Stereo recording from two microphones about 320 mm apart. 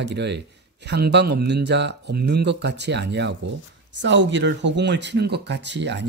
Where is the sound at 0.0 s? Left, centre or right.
Right.